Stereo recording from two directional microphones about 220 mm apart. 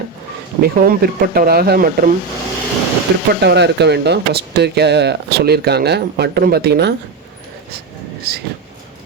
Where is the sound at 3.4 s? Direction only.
50° right (ahead or behind).